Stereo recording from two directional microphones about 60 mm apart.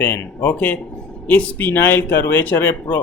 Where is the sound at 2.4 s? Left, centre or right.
Left.